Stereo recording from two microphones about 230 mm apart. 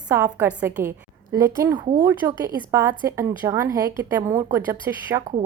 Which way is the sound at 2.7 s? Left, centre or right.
Centre.